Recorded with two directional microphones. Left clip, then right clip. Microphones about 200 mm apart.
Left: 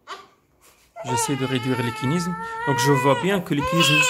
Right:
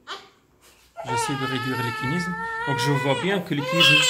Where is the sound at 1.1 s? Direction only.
55° left (ahead or behind).